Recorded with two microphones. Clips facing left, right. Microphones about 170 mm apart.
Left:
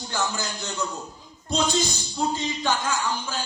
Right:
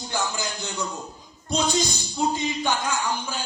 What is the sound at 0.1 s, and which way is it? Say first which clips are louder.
Speech: even; 15° right (ahead or behind).